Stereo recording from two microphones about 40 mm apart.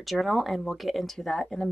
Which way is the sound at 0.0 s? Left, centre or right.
Centre.